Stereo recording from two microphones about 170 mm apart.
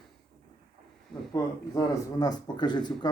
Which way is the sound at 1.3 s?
20° left (ahead or behind).